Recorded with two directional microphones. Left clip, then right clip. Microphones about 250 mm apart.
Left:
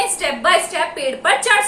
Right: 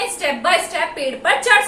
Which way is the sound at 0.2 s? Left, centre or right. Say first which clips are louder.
Even; centre.